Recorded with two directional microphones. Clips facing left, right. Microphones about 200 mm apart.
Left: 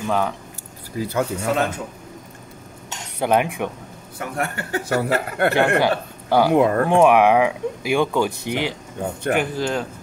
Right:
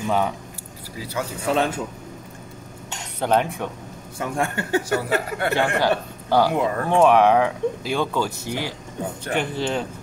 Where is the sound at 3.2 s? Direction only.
10° left (ahead or behind).